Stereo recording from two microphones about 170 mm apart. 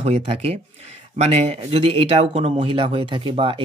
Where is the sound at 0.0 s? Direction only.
35° right (ahead or behind).